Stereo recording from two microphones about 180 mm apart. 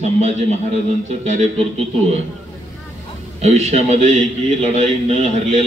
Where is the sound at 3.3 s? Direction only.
35° right (ahead or behind).